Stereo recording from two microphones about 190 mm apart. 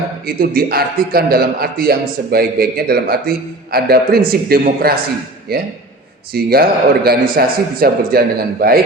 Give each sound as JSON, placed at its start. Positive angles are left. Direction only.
{"t": 0.3, "sound": "a man's voice", "side_deg": -55}